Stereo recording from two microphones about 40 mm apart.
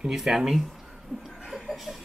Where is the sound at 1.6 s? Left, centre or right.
Centre.